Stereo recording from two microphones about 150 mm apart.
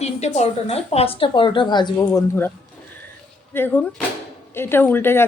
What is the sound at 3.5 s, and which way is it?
Speech, 15° left (ahead or behind).